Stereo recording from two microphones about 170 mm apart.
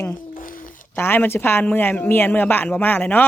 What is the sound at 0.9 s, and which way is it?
A man's voice, 15° left (ahead or behind).